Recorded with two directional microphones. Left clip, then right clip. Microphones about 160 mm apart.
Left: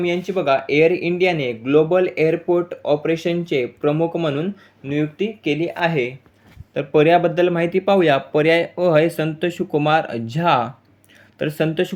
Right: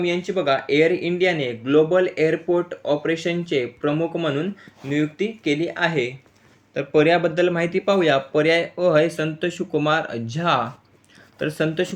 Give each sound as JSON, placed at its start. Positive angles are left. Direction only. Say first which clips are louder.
{"t": 0.0, "sound": "speech", "louder": "left 2 dB", "side_deg": 10}
{"t": 6.7, "sound": "speech", "louder": "left 3 dB", "side_deg": 20}